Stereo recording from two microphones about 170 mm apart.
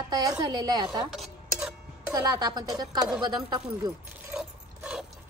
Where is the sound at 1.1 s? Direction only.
5° right (ahead or behind).